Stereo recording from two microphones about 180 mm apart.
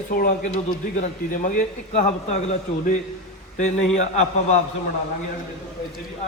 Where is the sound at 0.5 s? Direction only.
45° left (ahead or behind).